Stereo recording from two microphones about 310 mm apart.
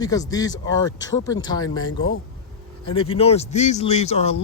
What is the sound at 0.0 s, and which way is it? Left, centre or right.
Speech, centre.